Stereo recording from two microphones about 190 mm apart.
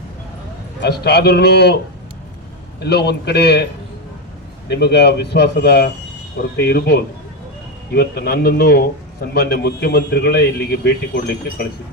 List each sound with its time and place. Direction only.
0.8 s a man's voice: 60° left (ahead or behind)
2.8 s a man's voice: 60° left (ahead or behind)
4.7 s a man's voice: 60° left (ahead or behind)